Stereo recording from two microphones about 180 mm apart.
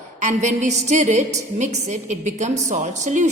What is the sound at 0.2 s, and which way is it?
A woman's voice, 40° right (ahead or behind).